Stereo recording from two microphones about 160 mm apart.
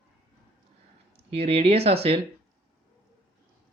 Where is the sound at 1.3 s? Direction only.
35° right (ahead or behind).